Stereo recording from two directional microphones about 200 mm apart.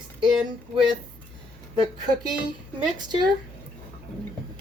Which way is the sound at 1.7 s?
20° right (ahead or behind).